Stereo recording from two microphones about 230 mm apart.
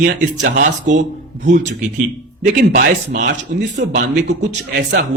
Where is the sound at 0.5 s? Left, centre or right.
Right.